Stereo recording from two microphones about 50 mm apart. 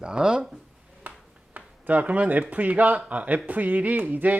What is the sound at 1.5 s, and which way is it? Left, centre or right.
A man's voice, right.